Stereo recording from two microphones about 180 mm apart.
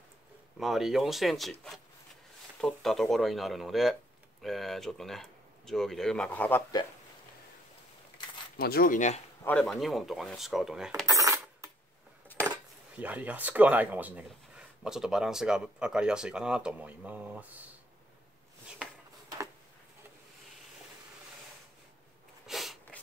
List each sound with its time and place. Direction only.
0.6 s speech: centre (ahead or behind)
8.5 s speech: 55° left (ahead or behind)
9.4 s speech: 5° left (ahead or behind)
11.1 s cutlery: 20° right (ahead or behind)
12.4 s speech: 10° right (ahead or behind)
22.5 s sneeze: centre (ahead or behind)